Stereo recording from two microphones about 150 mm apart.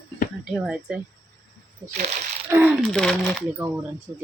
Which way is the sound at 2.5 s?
15° right (ahead or behind).